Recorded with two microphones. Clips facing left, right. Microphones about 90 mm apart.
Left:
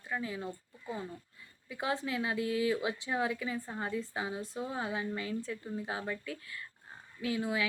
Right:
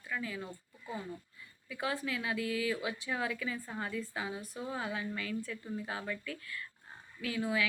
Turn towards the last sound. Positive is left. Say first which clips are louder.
# left 1 dB
turn(degrees=25)  # may be behind; listen again after turning